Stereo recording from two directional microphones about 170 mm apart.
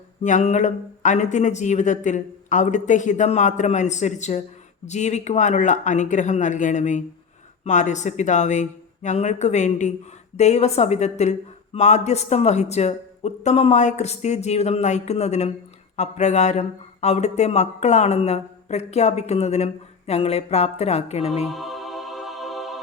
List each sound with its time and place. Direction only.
0.2 s speech: 45° left (ahead or behind)
21.4 s music: centre (ahead or behind)